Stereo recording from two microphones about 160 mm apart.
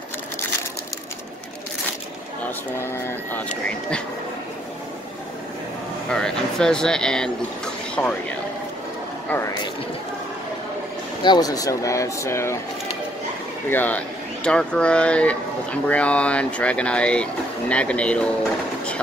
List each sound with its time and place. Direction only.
2.4 s speech: 15° left (ahead or behind)
6.0 s speech: 5° left (ahead or behind)
11.2 s speech: 25° left (ahead or behind)
13.7 s speech: 10° left (ahead or behind)